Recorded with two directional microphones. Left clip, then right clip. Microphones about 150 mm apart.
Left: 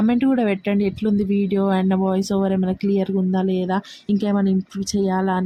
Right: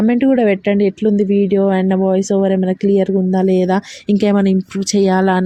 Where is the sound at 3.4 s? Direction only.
30° right (ahead or behind).